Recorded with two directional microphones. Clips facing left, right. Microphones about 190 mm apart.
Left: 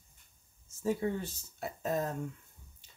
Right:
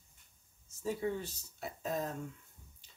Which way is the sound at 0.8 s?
50° left (ahead or behind).